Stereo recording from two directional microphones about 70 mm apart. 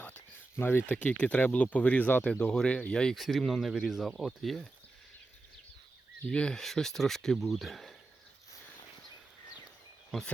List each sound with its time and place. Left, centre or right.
0.5 s speech: left
0.9 s speech: centre
6.2 s speech: centre